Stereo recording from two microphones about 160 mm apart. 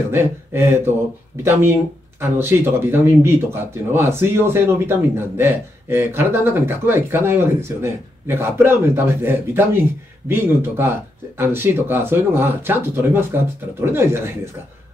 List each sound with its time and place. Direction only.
0.1 s a man's voice: 15° right (ahead or behind)